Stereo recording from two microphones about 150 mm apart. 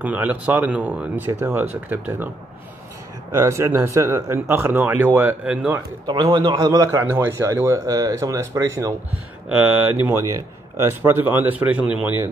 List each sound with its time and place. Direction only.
0.0 s speech: 10° right (ahead or behind)
6.0 s a man's voice: 30° right (ahead or behind)
9.5 s speech: 10° right (ahead or behind)